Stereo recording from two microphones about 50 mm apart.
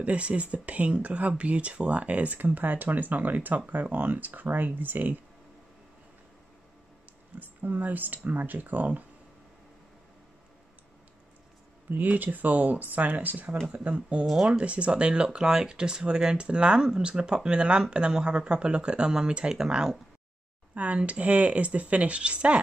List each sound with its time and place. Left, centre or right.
0.0 s speech: right
7.3 s speech: right
11.9 s speech: right
13.7 s speech: right
14.2 s speech: centre
14.6 s speech: right
20.7 s speech: right